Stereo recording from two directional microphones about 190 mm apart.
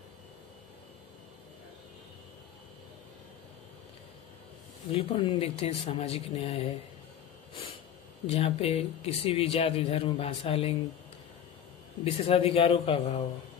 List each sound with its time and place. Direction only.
4.9 s speech: 25° left (ahead or behind)
8.3 s speech: 30° left (ahead or behind)
12.0 s speech: 30° left (ahead or behind)